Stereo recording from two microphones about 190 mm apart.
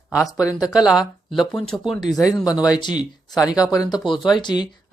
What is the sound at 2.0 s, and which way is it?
Speech, 20° left (ahead or behind).